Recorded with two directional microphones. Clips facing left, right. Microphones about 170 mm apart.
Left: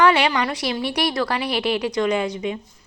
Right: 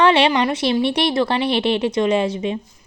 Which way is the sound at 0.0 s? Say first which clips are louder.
Right 3 dB; 25° right (ahead or behind).